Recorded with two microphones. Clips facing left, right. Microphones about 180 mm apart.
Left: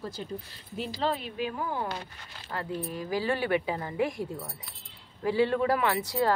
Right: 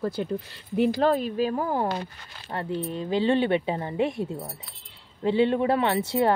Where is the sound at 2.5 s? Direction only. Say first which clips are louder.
Right 4 dB; 25° right (ahead or behind).